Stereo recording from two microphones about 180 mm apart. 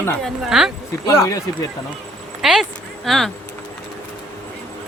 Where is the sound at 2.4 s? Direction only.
Centre (ahead or behind).